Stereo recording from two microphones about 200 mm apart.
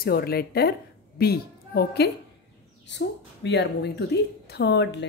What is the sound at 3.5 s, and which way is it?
Speech, 55° left (ahead or behind).